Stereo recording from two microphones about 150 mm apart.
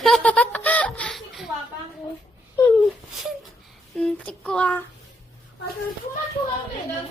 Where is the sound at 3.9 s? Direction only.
5° left (ahead or behind).